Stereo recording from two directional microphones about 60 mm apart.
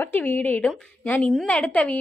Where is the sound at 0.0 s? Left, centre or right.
Left.